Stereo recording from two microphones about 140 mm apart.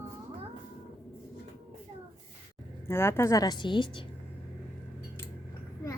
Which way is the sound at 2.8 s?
15° left (ahead or behind).